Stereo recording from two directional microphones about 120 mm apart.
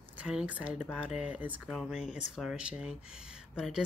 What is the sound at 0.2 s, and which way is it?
Speech, 10° right (ahead or behind).